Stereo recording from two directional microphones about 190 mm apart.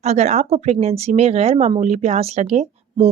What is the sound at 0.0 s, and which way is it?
Speech, 35° right (ahead or behind).